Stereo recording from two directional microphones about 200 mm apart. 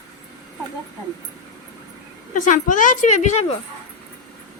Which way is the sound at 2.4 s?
40° left (ahead or behind).